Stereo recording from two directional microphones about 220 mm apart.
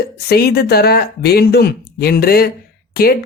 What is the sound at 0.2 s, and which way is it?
Speech, 45° left (ahead or behind).